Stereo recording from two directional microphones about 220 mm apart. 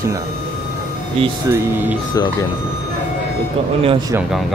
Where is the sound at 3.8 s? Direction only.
25° right (ahead or behind).